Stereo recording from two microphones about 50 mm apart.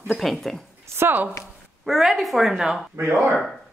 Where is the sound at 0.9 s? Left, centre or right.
Right.